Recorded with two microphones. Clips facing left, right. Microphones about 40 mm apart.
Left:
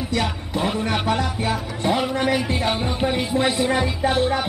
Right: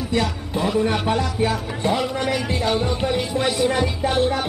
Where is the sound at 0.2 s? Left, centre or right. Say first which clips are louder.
Right 1 dB; left.